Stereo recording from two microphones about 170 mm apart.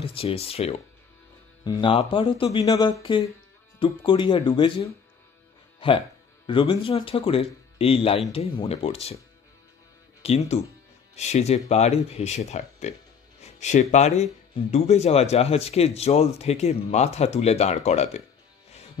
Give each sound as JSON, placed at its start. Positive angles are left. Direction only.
{"t": 0.0, "sound": "speech", "side_deg": 30}
{"t": 10.2, "sound": "speech", "side_deg": 35}